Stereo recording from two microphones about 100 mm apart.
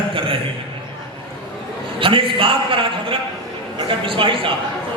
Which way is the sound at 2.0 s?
60° right (ahead or behind).